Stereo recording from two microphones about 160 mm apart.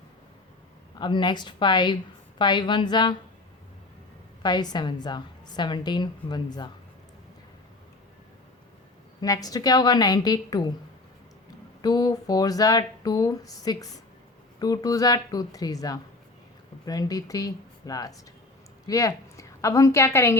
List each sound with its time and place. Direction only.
0.9 s a woman's voice: 30° left (ahead or behind)
4.4 s a woman's voice: 25° left (ahead or behind)
9.2 s a woman's voice: 25° left (ahead or behind)
11.8 s a woman's voice: 25° left (ahead or behind)